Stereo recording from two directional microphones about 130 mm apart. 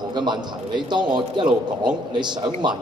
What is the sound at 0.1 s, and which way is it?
A man's voice, 35° right (ahead or behind).